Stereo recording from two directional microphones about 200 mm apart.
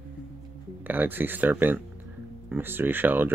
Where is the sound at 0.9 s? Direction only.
10° right (ahead or behind).